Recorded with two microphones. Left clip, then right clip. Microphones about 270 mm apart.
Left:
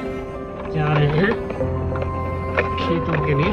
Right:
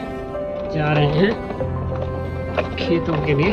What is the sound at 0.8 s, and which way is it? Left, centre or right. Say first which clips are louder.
Speech: right 1 dB; centre.